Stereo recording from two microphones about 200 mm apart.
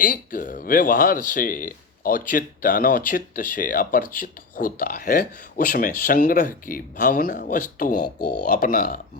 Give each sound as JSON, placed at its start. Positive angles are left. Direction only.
{"t": 0.0, "sound": "speech", "side_deg": 45}